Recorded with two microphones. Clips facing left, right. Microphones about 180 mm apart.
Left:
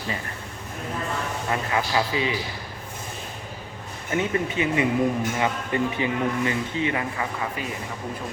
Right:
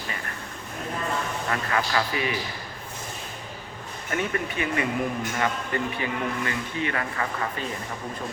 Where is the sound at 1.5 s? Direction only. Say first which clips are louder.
Left 2 dB; 20° left (ahead or behind).